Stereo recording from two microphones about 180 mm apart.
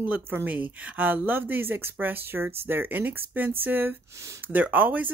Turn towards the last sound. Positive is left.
turn(degrees=-10)  # may be behind; listen again after turning